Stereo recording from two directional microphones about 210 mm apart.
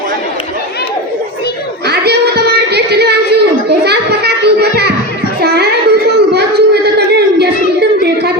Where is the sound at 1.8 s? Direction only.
50° right (ahead or behind).